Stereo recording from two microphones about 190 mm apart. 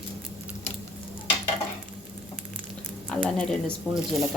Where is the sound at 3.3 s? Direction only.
5° left (ahead or behind).